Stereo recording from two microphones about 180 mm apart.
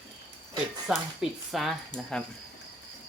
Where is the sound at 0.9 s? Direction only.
Centre (ahead or behind).